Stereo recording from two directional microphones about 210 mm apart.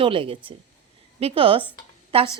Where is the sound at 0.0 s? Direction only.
25° right (ahead or behind).